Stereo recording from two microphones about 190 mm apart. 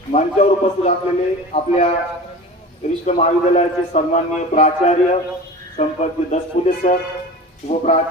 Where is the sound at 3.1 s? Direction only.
35° left (ahead or behind).